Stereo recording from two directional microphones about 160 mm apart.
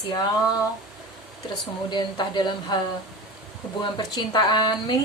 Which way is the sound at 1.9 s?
25° left (ahead or behind).